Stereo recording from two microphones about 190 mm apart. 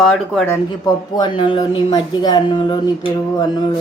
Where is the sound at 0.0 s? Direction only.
Centre (ahead or behind).